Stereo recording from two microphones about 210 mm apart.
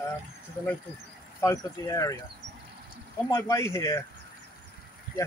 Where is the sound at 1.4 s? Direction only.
15° left (ahead or behind).